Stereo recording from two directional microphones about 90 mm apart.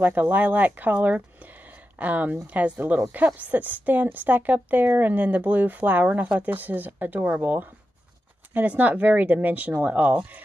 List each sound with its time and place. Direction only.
0.0 s a woman's voice: 20° right (ahead or behind)